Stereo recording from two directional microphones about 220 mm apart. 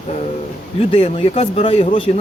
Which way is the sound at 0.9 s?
25° left (ahead or behind).